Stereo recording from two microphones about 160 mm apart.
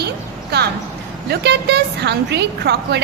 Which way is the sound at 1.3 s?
90° right.